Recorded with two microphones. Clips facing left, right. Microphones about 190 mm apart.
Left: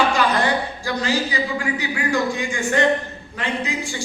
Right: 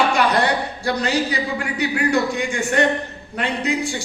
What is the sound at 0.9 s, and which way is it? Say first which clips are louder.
A man's voice: right 3 dB; 65° right (ahead or behind).